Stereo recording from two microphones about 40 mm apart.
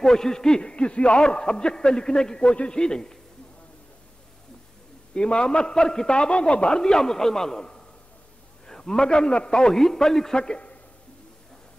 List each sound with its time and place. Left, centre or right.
0.0 s a man's voice: centre
0.6 s a man's voice: left
5.1 s a man's voice: left